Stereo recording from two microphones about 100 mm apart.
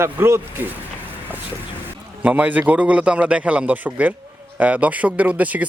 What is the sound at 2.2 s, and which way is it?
A man's voice, 15° right (ahead or behind).